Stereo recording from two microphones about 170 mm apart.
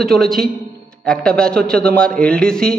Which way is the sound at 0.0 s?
Centre (ahead or behind).